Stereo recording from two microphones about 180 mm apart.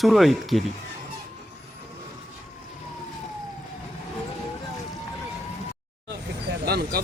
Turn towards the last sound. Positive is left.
turn(degrees=-60)  # may be behind; listen again after turning